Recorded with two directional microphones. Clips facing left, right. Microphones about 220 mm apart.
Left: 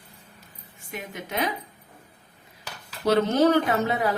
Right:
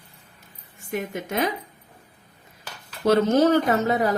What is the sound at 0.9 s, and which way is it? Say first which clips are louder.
Speech: right 6 dB; 45° right (ahead or behind).